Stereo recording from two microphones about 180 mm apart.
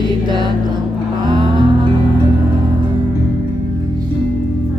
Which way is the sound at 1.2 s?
25° right (ahead or behind).